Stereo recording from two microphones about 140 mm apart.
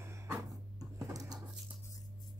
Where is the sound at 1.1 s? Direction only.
25° right (ahead or behind).